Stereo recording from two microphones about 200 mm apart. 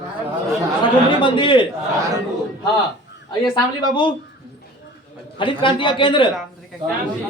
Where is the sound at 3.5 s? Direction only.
25° left (ahead or behind).